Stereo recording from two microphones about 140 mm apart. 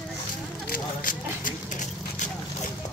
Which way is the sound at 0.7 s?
75° left (ahead or behind).